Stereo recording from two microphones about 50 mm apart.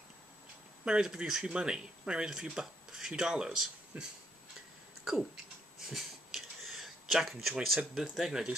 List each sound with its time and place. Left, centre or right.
0.8 s speech: centre
3.9 s speech: right
5.0 s a sound: centre
7.9 s speech: centre